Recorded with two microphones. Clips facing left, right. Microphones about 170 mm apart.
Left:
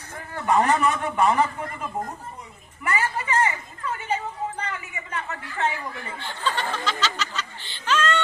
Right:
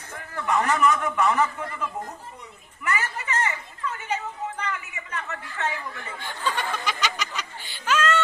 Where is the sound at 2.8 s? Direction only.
30° left (ahead or behind).